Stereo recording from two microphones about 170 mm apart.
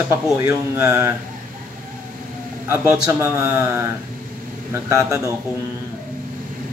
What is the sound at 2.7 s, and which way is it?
A man's voice, 10° right (ahead or behind).